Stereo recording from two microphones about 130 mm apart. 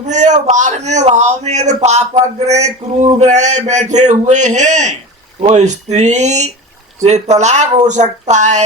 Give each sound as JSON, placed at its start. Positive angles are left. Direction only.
{"t": 0.0, "sound": "a man's voice", "side_deg": -70}